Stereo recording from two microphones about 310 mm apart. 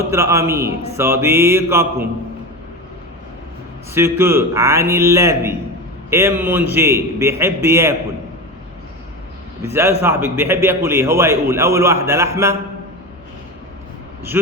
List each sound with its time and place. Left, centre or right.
0.0 s a man's voice: centre
3.9 s a man's voice: centre
9.6 s a man's voice: centre